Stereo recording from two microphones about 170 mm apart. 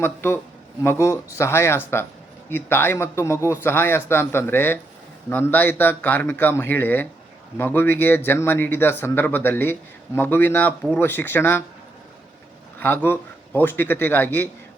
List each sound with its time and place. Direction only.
0.0 s speech: 15° left (ahead or behind)
12.8 s speech: 15° left (ahead or behind)